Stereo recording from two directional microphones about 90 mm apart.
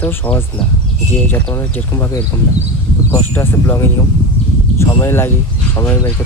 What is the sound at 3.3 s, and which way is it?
Speech, 25° left (ahead or behind).